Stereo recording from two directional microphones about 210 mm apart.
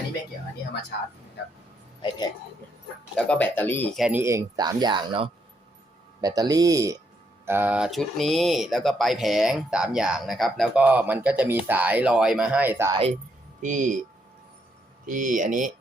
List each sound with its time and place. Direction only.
2.0 s speech: 20° left (ahead or behind)
3.2 s speech: 5° left (ahead or behind)
4.0 s speech: 10° right (ahead or behind)
13.6 s speech: 35° right (ahead or behind)
15.0 s speech: 35° right (ahead or behind)